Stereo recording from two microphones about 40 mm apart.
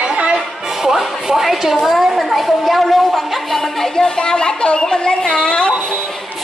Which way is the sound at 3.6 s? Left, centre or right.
Centre.